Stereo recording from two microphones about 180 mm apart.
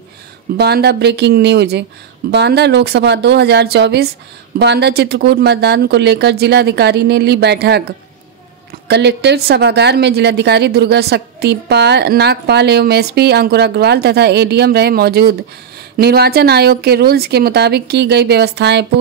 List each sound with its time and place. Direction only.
0.6 s speech: 65° right (ahead or behind)
8.8 s speech: 65° right (ahead or behind)